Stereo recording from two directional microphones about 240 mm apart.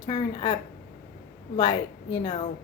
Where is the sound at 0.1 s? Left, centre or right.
Centre.